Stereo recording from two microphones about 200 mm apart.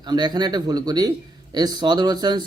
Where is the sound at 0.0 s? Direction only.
20° right (ahead or behind).